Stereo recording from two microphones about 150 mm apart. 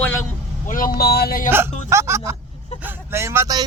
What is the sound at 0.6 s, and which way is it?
Speech, 65° left (ahead or behind).